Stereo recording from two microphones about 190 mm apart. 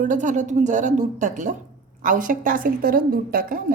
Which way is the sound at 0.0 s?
40° right (ahead or behind).